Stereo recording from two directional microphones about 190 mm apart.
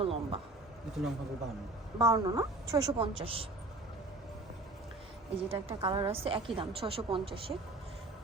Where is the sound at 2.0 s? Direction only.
20° right (ahead or behind).